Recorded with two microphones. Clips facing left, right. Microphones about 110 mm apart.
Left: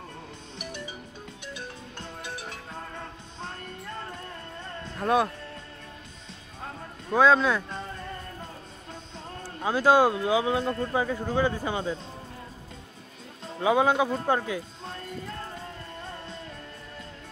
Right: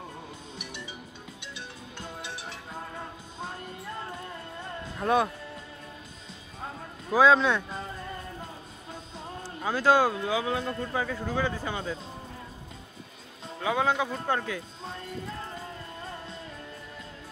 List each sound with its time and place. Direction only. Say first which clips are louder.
0.6 s music: left 6 dB; 45° left (ahead or behind)
2.7 s music: even; 10° right (ahead or behind)
4.8 s speech: left 1 dB; centre (ahead or behind)
6.6 s music: even; centre (ahead or behind)
9.7 s speech: left 2 dB; 15° left (ahead or behind)
10.9 s speech: left 3 dB; 20° left (ahead or behind)
13.6 s speech: left 4 dB; 20° left (ahead or behind)
14.9 s music: right 3 dB; centre (ahead or behind)